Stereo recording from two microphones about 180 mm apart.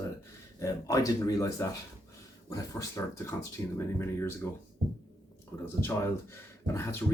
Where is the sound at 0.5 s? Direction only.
20° left (ahead or behind).